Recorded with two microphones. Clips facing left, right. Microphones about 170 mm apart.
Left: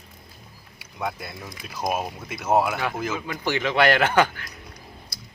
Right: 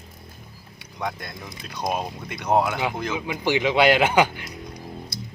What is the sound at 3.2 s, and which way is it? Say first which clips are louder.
A man's voice: right 3 dB; 15° right (ahead or behind).